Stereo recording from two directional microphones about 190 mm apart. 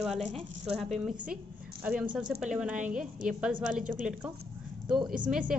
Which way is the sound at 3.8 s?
45° right (ahead or behind).